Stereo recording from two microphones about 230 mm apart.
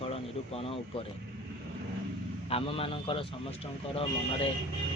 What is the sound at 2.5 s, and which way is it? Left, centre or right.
A man's voice, left.